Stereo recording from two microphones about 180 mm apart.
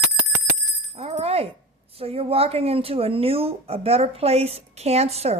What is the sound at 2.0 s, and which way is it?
Speech, 35° right (ahead or behind).